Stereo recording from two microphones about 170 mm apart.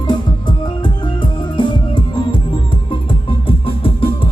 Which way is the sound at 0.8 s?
25° left (ahead or behind).